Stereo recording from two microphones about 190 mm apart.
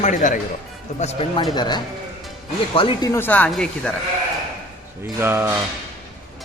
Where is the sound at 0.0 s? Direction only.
40° left (ahead or behind).